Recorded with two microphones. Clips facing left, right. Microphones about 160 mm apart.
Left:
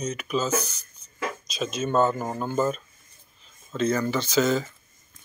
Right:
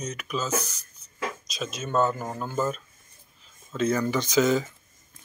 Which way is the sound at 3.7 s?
10° right (ahead or behind).